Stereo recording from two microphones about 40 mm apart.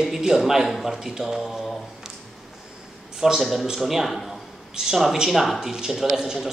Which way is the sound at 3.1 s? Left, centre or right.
Centre.